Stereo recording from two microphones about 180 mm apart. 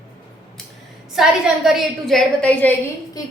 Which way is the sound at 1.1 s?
5° right (ahead or behind).